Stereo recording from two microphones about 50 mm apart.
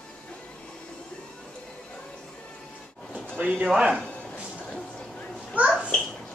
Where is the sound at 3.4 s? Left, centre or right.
Right.